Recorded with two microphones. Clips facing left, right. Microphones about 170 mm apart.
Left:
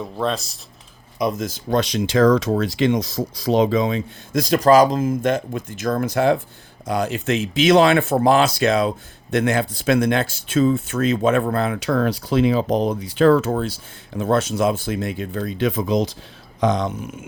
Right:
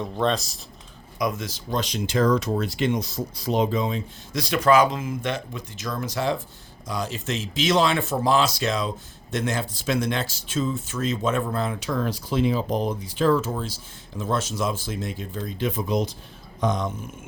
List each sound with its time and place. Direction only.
0.0 s speech: centre (ahead or behind)
1.4 s speech: 50° left (ahead or behind)
1.8 s speech: 90° left
4.3 s speech: 45° left (ahead or behind); by 17.2 s 80° left